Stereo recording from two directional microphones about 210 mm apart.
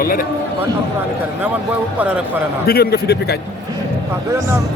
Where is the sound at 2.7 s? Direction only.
50° left (ahead or behind).